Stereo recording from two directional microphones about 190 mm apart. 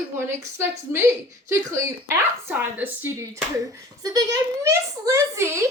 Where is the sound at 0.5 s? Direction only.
15° right (ahead or behind).